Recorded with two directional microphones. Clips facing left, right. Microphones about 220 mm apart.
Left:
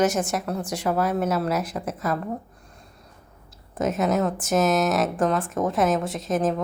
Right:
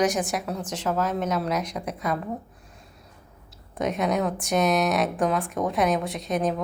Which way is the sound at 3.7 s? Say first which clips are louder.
Left 2 dB; 5° left (ahead or behind).